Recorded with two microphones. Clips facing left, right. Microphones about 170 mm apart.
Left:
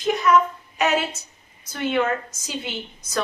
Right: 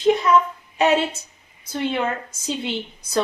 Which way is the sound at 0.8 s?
30° right (ahead or behind).